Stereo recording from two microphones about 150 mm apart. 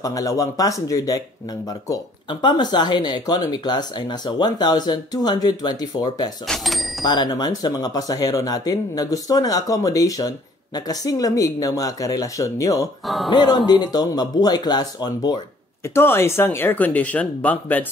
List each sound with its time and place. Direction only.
0.0 s speech: 25° left (ahead or behind)
6.4 s speech: centre (ahead or behind)
7.1 s speech: 30° left (ahead or behind)
13.0 s speech: centre (ahead or behind)
13.3 s speech: 30° left (ahead or behind)
15.9 s speech: 15° left (ahead or behind)